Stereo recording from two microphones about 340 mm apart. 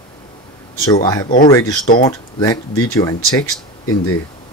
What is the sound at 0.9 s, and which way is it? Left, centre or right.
Speech, centre.